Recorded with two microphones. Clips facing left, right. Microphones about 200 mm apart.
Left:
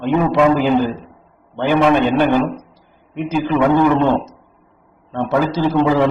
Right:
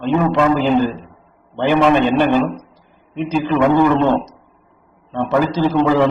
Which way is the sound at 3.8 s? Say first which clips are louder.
Even; 15° left (ahead or behind).